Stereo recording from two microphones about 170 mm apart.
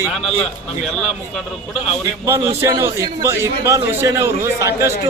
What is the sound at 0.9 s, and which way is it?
Speech, 5° left (ahead or behind).